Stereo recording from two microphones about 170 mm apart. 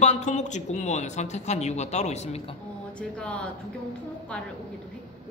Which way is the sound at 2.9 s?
5° left (ahead or behind).